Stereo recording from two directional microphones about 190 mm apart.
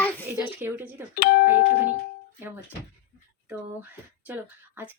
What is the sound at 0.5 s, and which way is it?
Speech, 10° right (ahead or behind).